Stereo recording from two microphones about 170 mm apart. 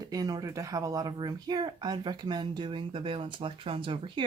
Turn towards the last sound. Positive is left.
turn(degrees=-30)  # may be behind; listen again after turning